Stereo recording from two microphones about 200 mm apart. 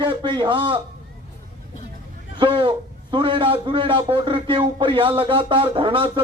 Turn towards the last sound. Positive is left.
turn(degrees=-25)  # may be behind; listen again after turning